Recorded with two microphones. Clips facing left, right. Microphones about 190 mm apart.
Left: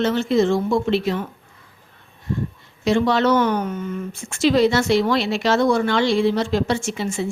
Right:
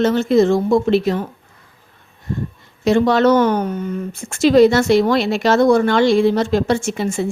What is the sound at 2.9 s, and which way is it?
Speech, 45° right (ahead or behind).